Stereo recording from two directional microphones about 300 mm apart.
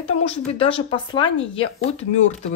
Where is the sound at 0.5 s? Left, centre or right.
Centre.